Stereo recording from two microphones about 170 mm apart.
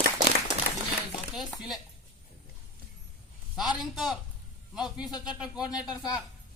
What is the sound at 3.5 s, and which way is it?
A woman's voice, centre (ahead or behind).